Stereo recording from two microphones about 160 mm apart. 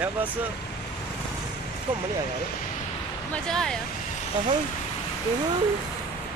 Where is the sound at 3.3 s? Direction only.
5° left (ahead or behind).